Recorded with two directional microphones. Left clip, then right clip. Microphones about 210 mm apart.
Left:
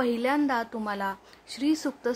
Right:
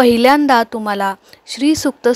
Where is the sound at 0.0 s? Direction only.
40° right (ahead or behind).